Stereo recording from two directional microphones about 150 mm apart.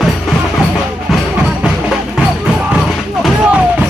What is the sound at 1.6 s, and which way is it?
Music, 5° right (ahead or behind).